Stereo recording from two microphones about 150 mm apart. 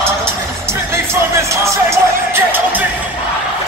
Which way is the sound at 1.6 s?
15° right (ahead or behind).